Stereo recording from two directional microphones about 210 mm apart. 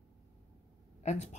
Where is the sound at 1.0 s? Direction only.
35° left (ahead or behind).